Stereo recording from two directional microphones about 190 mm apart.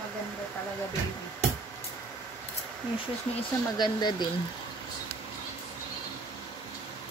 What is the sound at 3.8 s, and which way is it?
Speech, 20° left (ahead or behind).